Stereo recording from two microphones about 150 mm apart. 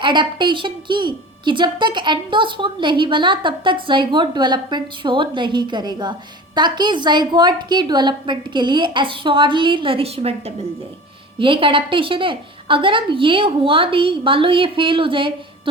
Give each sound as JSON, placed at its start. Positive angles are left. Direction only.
{"t": 0.0, "sound": "a woman's voice", "side_deg": -30}